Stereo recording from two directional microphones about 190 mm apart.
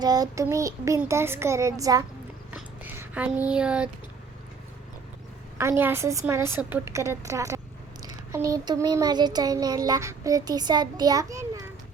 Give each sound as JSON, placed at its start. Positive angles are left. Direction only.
{"t": 0.0, "sound": "speech", "side_deg": -20}
{"t": 2.5, "sound": "a sound", "side_deg": -10}
{"t": 5.5, "sound": "speech", "side_deg": -15}
{"t": 8.0, "sound": "child singing", "side_deg": -15}